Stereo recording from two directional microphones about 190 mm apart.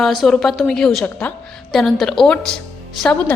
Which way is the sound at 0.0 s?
Centre (ahead or behind).